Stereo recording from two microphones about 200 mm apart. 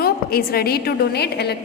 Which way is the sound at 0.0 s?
50° left (ahead or behind).